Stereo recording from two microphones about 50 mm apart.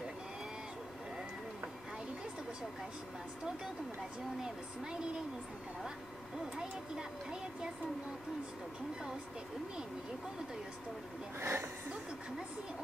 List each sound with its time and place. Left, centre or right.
7.0 s speech: centre
11.3 s speech: right